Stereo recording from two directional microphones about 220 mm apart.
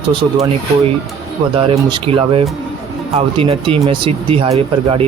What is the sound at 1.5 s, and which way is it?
Speech, 25° right (ahead or behind).